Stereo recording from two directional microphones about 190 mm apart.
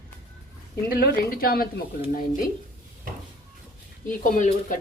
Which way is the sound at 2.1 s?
45° left (ahead or behind).